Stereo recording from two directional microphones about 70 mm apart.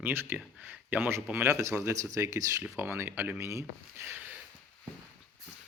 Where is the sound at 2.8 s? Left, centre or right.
Right.